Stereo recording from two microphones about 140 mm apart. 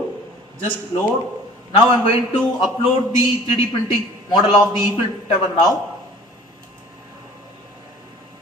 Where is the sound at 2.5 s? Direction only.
35° left (ahead or behind).